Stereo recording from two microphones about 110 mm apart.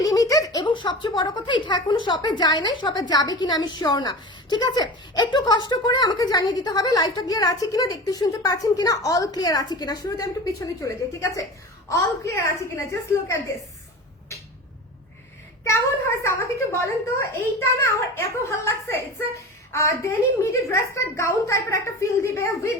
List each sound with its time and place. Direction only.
0.0 s a sound: 30° left (ahead or behind)
0.6 s a woman's voice: 45° left (ahead or behind); by 13.4 s 25° left (ahead or behind)
15.7 s a woman's voice: 25° left (ahead or behind)